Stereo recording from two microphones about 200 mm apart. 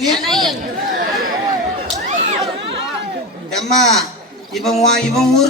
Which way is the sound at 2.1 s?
35° right (ahead or behind).